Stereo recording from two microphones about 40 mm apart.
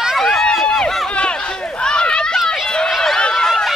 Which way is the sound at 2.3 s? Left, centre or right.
Centre.